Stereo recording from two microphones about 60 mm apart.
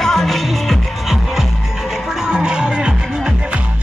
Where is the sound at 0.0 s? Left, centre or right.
Centre.